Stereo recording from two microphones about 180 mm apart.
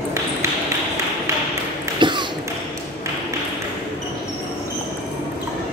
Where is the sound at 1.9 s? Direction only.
25° right (ahead or behind).